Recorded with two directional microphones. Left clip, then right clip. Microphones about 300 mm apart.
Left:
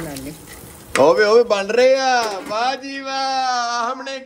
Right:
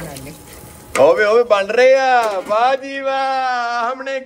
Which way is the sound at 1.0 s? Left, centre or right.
Centre.